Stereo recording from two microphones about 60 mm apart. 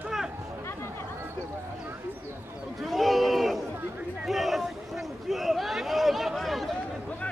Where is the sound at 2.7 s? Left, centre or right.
Centre.